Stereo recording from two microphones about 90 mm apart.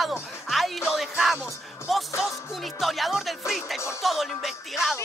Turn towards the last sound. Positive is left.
turn(degrees=0)  # may be behind; listen again after turning